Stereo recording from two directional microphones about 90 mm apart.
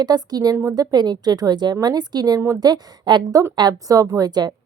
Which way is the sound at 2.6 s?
55° right (ahead or behind).